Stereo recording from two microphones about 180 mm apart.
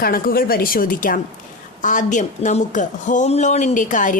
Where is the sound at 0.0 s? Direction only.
55° left (ahead or behind).